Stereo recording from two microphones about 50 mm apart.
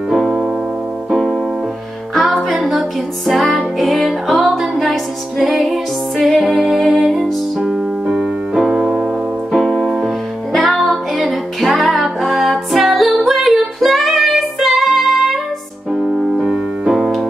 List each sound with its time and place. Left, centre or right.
0.1 s music: centre
1.1 s piano: centre
2.2 s music: centre
7.6 s keyboard: centre
9.5 s music: centre
15.9 s piano: centre